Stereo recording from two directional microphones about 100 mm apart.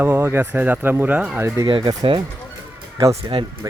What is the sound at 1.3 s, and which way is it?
Speech, 30° right (ahead or behind).